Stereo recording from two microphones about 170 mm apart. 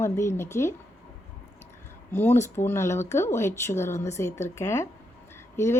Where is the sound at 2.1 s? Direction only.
15° left (ahead or behind).